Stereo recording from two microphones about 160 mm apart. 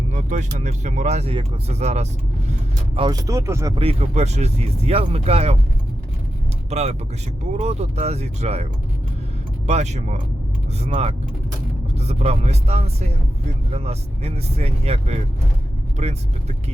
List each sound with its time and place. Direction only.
0.1 s speech: 50° right (ahead or behind)
3.1 s speech: 20° right (ahead or behind)
3.8 s speech: 40° right (ahead or behind)
6.7 s speech: 45° right (ahead or behind)
9.6 s speech: 45° right (ahead or behind)